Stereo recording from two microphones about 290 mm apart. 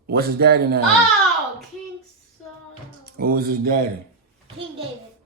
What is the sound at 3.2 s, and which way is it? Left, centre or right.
Speech, right.